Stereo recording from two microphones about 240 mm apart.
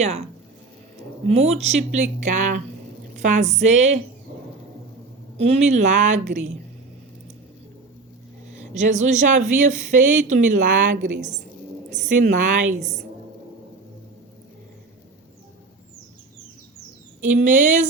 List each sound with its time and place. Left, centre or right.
1.3 s speech: right
5.4 s speech: right
8.5 s speech: right
17.3 s speech: right